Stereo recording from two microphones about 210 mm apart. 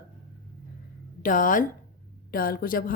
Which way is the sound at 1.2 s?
40° left (ahead or behind).